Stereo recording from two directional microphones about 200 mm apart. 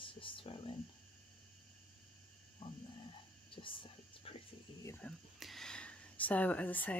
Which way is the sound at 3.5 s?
25° left (ahead or behind).